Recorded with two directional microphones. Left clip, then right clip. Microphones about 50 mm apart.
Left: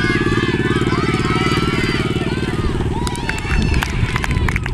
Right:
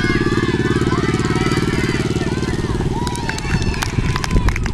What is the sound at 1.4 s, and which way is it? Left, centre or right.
Vehicle, left.